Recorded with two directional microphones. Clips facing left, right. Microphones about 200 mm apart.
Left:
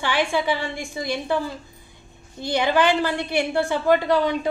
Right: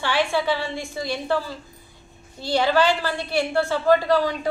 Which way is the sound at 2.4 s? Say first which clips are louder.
Even; 15° left (ahead or behind).